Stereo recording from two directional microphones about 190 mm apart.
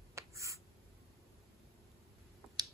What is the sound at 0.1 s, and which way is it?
Writing, 15° right (ahead or behind).